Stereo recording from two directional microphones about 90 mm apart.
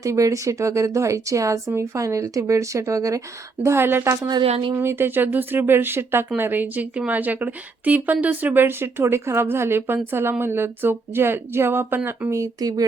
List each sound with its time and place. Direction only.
0.0 s speech: 35° right (ahead or behind)
4.3 s speech: 55° right (ahead or behind)
4.7 s speech: 25° right (ahead or behind)
12.3 s speech: 40° right (ahead or behind)